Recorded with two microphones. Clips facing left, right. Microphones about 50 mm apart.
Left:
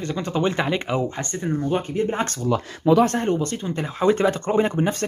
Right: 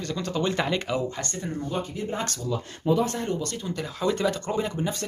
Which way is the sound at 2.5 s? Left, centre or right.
Left.